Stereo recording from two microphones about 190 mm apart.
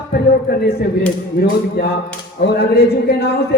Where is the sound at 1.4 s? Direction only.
55° left (ahead or behind).